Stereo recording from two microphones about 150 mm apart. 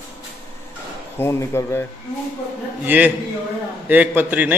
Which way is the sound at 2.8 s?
10° right (ahead or behind).